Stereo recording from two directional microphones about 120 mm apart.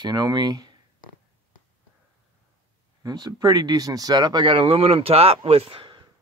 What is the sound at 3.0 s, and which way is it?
Speech, 35° right (ahead or behind).